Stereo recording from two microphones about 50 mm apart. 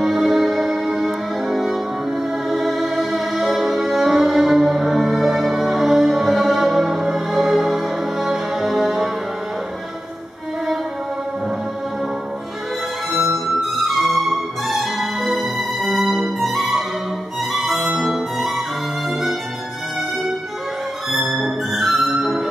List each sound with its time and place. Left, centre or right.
0.0 s music: centre
13.6 s music: centre
17.5 s violin: centre
17.9 s music: centre
21.1 s music: centre